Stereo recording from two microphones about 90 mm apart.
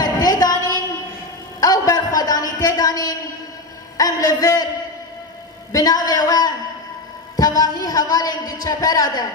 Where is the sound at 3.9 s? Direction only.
45° left (ahead or behind).